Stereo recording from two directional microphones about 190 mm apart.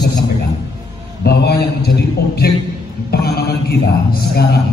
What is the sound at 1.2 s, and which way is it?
A man's voice, 55° left (ahead or behind).